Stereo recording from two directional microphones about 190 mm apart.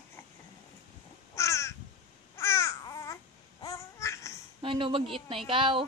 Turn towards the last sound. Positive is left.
turn(degrees=-25)  # may be behind; listen again after turning